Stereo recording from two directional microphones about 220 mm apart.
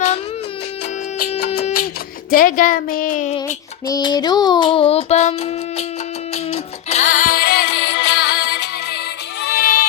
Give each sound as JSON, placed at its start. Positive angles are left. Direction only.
{"t": 2.3, "sound": "speech", "side_deg": 40}
{"t": 3.8, "sound": "child singing", "side_deg": 15}
{"t": 6.3, "sound": "music", "side_deg": 30}